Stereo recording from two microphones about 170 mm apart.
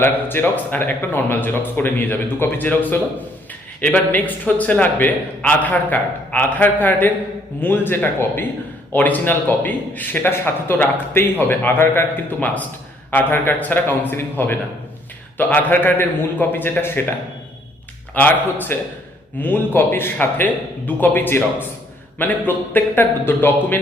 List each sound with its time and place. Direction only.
0.0 s a man's voice: 10° left (ahead or behind)
18.1 s a man's voice: 10° left (ahead or behind)